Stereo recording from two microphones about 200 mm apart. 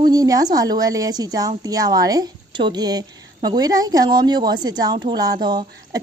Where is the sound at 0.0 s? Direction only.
20° right (ahead or behind).